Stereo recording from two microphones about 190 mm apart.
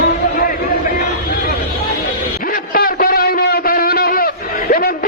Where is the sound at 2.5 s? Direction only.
50° left (ahead or behind).